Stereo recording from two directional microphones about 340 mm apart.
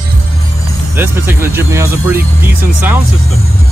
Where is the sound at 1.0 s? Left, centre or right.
Centre.